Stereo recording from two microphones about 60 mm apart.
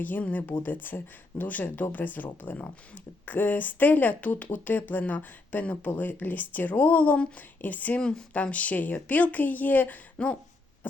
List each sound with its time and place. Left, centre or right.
0.0 s speech: left